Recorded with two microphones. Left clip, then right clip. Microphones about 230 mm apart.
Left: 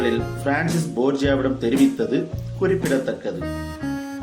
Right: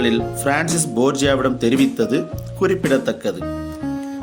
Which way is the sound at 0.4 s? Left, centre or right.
Right.